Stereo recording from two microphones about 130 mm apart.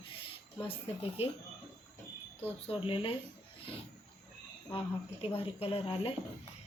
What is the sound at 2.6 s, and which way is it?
Speech, 45° left (ahead or behind).